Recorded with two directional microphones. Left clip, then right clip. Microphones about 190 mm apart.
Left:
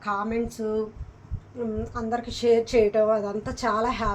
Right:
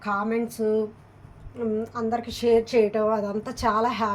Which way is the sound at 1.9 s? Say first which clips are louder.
Right 2 dB; 45° right (ahead or behind).